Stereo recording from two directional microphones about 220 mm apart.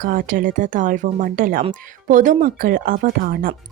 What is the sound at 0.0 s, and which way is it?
Speech, 40° right (ahead or behind).